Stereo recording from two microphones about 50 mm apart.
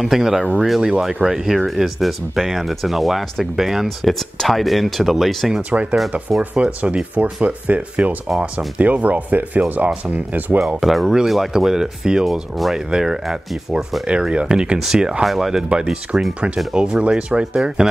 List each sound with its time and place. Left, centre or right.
0.0 s speech: centre
6.5 s speech: right
10.6 s speech: centre
12.3 s speech: centre
14.3 s speech: centre
15.2 s speech: centre
15.7 s speech: right